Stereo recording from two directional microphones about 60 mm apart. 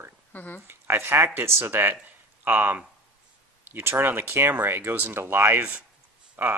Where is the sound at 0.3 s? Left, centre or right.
Left.